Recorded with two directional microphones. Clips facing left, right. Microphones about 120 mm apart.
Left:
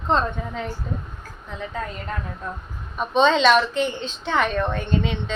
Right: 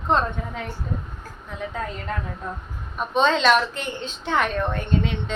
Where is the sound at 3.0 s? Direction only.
5° right (ahead or behind).